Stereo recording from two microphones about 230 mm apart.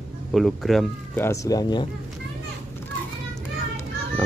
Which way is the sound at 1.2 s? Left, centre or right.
Centre.